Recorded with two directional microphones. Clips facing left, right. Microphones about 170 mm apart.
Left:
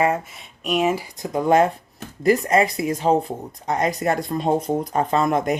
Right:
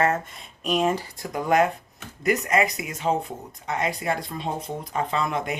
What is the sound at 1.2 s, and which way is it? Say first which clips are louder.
Speech: left 4 dB; 25° left (ahead or behind).